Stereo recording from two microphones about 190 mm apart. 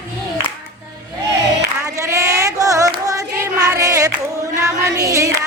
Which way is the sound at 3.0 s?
20° right (ahead or behind).